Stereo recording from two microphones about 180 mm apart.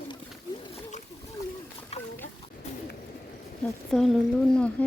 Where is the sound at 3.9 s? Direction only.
Centre (ahead or behind).